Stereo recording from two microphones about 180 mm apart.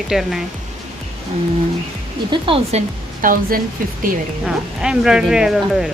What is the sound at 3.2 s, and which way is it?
Speech, 50° right (ahead or behind).